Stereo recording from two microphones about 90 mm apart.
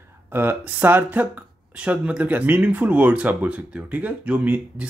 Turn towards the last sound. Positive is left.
turn(degrees=-15)  # may be behind; listen again after turning